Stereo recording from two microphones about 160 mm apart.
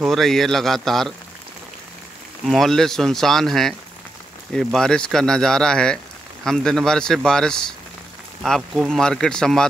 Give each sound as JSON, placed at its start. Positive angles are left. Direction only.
{"t": 0.0, "sound": "speech", "side_deg": 0}
{"t": 2.4, "sound": "speech", "side_deg": 0}